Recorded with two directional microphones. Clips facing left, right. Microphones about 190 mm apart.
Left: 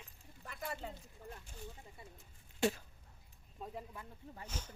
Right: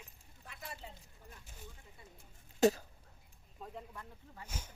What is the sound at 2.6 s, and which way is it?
Speech, 40° right (ahead or behind).